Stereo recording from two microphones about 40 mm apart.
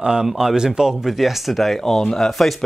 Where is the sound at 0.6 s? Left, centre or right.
Centre.